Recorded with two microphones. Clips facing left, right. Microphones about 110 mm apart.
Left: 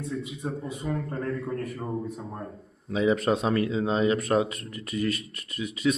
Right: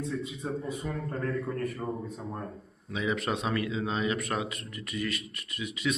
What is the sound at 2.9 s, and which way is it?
A man's voice, 35° left (ahead or behind).